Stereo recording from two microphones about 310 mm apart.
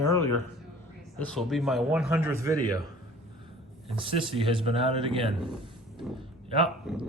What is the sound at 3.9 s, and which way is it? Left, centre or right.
Speech, centre.